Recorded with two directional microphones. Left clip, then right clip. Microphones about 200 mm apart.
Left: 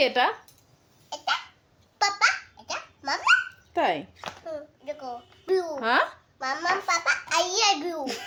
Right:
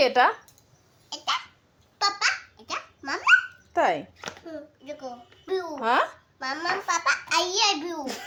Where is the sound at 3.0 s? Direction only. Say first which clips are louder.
Even; 25° left (ahead or behind).